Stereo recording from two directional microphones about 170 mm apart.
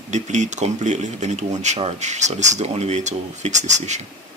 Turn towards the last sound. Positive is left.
turn(degrees=-45)  # may be behind; listen again after turning